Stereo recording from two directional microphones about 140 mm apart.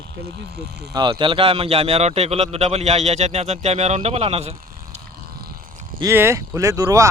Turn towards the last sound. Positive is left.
turn(degrees=-25)  # may be behind; listen again after turning